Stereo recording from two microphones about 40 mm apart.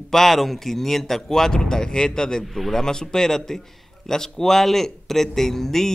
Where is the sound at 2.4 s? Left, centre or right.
Centre.